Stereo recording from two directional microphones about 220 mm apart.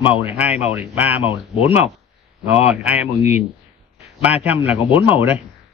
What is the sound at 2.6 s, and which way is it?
Speech, 5° right (ahead or behind).